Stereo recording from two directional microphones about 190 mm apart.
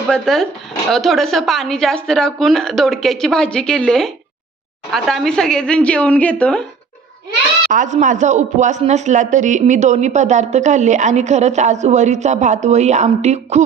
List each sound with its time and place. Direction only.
0.1 s a woman's voice: centre (ahead or behind)
7.7 s speech: 40° right (ahead or behind)